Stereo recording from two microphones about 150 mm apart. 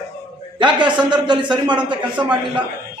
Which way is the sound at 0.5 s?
30° right (ahead or behind).